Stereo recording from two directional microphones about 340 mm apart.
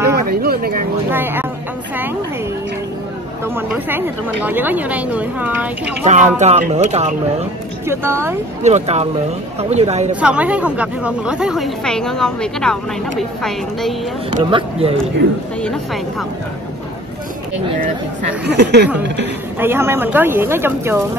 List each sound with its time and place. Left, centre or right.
0.1 s a sound: right
1.1 s speech: centre
3.4 s speech: centre
6.0 s speech: right
7.8 s speech: centre
8.6 s speech: centre
10.2 s speech: centre
14.3 s speech: centre
15.6 s speech: centre
18.5 s speech: right
19.6 s speech: centre